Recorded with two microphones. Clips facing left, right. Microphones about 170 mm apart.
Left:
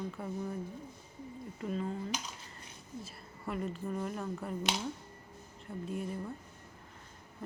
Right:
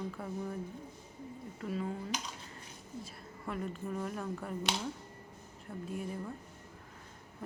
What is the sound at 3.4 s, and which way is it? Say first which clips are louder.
Speech: left 2 dB; centre (ahead or behind).